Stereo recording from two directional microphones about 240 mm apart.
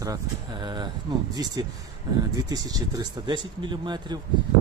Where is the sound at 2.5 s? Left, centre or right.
Centre.